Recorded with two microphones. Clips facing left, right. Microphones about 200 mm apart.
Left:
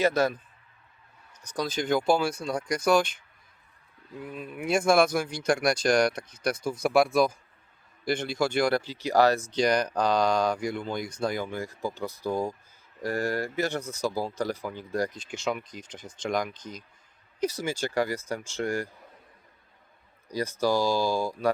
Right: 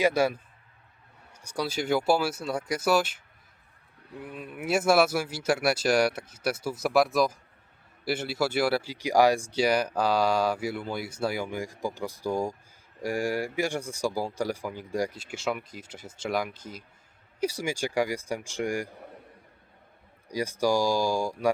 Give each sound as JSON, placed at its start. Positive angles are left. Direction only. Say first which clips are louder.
{"t": 0.0, "sound": "speech", "louder": "even", "side_deg": -10}
{"t": 4.2, "sound": "speech", "louder": "left 2 dB", "side_deg": 0}
{"t": 18.9, "sound": "a sound", "louder": "right 7 dB", "side_deg": -65}
{"t": 20.2, "sound": "speech", "louder": "even", "side_deg": -10}